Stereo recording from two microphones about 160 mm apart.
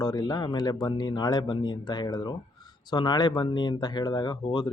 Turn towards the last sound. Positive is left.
turn(degrees=25)  # may be behind; listen again after turning